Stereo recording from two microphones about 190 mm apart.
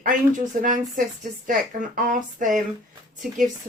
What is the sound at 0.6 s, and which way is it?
Speech, 45° right (ahead or behind).